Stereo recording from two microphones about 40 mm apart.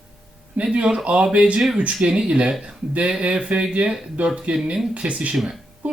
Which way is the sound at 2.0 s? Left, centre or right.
Centre.